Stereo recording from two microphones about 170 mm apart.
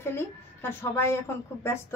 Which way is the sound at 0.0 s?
15° left (ahead or behind).